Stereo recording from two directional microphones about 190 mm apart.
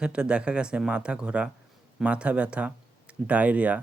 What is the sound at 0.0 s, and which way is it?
Speech, 5° right (ahead or behind).